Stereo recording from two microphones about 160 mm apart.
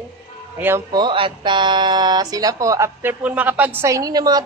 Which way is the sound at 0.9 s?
30° right (ahead or behind).